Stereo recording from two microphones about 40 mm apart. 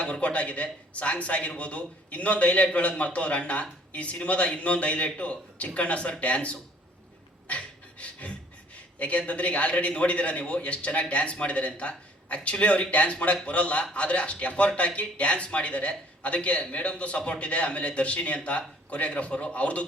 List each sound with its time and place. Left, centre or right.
0.0 s speech: left
7.4 s beatboxing: left
9.0 s speech: left